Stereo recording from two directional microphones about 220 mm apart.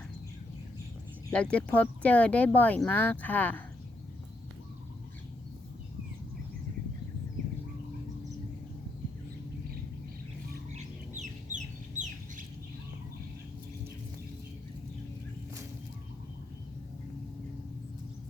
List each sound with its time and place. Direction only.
1.3 s speech: 5° left (ahead or behind)
11.2 s chicken: 35° right (ahead or behind)